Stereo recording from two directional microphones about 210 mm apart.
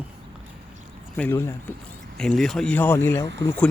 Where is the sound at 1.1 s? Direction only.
10° left (ahead or behind).